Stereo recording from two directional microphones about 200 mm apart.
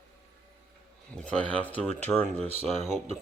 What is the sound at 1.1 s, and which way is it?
Speech, 5° left (ahead or behind).